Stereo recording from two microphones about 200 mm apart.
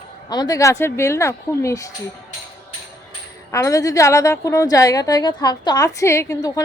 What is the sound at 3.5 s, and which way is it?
A woman's voice, 15° left (ahead or behind).